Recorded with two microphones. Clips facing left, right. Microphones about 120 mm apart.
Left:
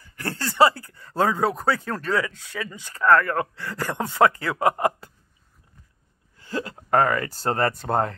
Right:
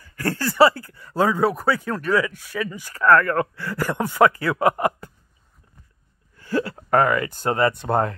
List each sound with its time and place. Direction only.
0.0 s speech: 25° left (ahead or behind)
6.3 s speech: 20° left (ahead or behind)